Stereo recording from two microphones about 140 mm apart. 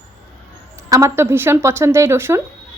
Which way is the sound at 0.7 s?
20° right (ahead or behind).